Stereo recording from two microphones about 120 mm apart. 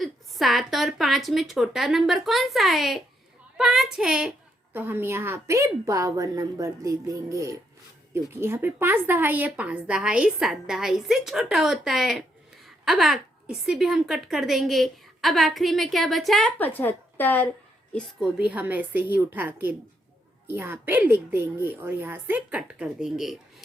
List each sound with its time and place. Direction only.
0.0 s a woman's voice: centre (ahead or behind)
4.7 s a woman's voice: 15° right (ahead or behind); by 16.5 s centre (ahead or behind)
16.6 s speech: 15° left (ahead or behind)
18.2 s speech: 5° right (ahead or behind)